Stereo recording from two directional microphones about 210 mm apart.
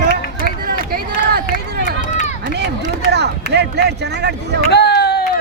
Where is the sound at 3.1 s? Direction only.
55° right (ahead or behind).